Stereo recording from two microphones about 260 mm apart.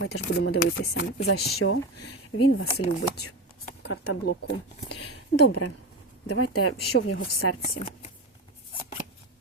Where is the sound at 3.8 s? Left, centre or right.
Left.